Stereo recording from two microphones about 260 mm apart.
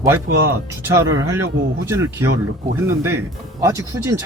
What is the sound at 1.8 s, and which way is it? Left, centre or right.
Speech, centre.